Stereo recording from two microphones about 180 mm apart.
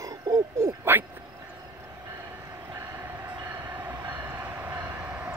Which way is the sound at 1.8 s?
15° right (ahead or behind).